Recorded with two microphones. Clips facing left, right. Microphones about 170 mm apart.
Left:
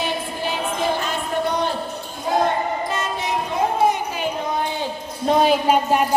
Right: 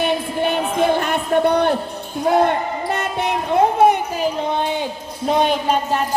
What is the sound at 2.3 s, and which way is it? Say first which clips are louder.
Speech: right 5 dB; 60° right (ahead or behind).